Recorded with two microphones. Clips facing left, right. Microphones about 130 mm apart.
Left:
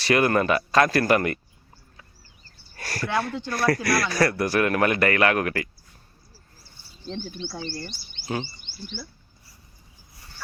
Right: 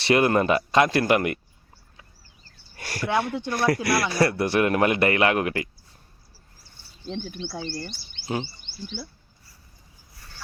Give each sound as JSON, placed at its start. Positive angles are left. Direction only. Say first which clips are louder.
{"t": 0.0, "sound": "speech", "louder": "right 1 dB", "side_deg": -25}
{"t": 2.7, "sound": "speech", "louder": "right 2 dB", "side_deg": -15}
{"t": 7.1, "sound": "speech", "louder": "right 1 dB", "side_deg": -5}